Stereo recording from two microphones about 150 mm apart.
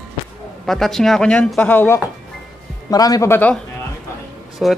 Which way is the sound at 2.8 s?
25° left (ahead or behind).